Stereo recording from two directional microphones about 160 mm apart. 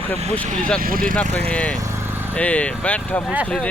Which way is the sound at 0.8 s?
60° right (ahead or behind).